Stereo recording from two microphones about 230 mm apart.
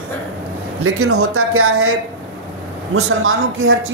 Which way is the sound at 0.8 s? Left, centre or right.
Right.